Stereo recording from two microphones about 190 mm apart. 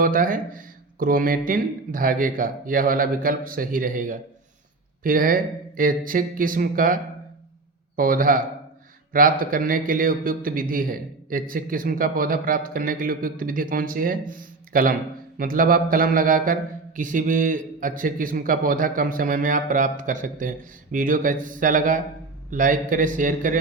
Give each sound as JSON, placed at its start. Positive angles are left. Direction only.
{"t": 0.0, "sound": "a man's voice", "side_deg": -45}